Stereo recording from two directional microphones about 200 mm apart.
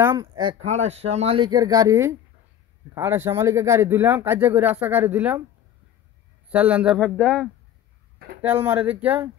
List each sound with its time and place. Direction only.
0.0 s speech: 20° right (ahead or behind)
0.7 s speech: 35° right (ahead or behind); by 5.4 s 10° right (ahead or behind)
6.5 s speech: 5° right (ahead or behind)
8.4 s speech: 10° right (ahead or behind)